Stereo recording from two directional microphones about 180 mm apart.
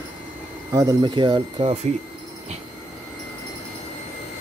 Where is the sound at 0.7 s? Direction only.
20° right (ahead or behind).